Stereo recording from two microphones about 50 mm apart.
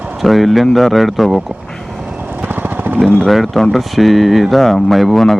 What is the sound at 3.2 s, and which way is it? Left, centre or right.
Speech, centre.